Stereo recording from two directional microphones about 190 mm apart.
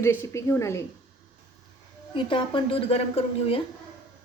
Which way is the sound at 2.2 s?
25° left (ahead or behind).